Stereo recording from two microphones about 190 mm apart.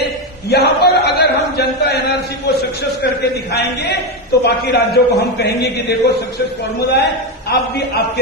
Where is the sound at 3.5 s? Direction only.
60° left (ahead or behind).